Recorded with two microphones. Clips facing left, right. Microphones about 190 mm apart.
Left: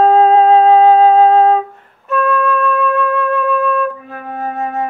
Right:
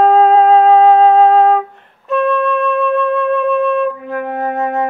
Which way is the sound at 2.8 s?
20° right (ahead or behind).